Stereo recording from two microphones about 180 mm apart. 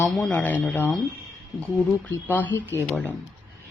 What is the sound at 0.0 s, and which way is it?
Speech, centre (ahead or behind).